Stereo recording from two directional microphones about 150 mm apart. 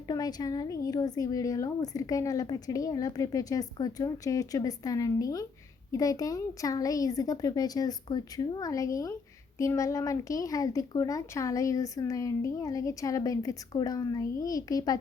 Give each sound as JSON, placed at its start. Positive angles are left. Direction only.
{"t": 0.1, "sound": "speech", "side_deg": 25}